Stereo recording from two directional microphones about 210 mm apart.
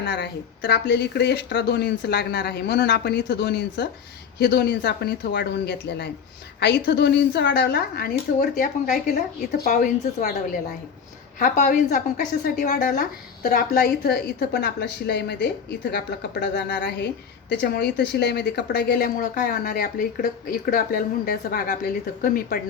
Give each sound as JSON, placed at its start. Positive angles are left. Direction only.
{"t": 0.0, "sound": "a woman's voice", "side_deg": 55}